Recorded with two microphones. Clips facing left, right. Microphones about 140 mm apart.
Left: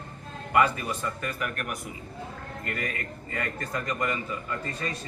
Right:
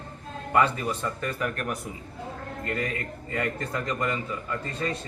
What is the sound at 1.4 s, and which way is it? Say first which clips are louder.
Speech: right 3 dB; 25° right (ahead or behind).